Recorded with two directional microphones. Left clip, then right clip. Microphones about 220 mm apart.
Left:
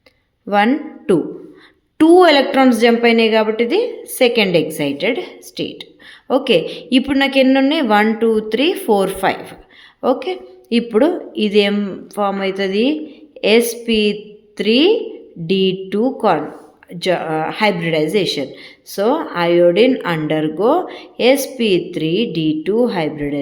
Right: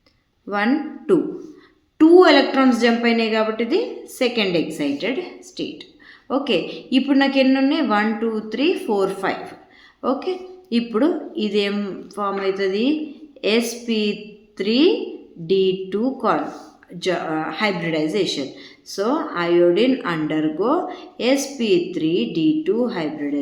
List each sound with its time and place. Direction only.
0.4 s a woman's voice: 40° left (ahead or behind)